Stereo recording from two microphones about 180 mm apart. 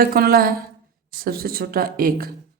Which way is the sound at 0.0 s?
55° right (ahead or behind).